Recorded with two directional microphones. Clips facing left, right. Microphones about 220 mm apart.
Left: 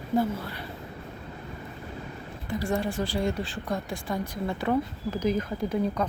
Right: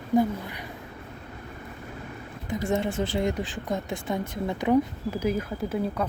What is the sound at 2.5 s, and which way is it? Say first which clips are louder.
Speech: right 2 dB; 20° right (ahead or behind).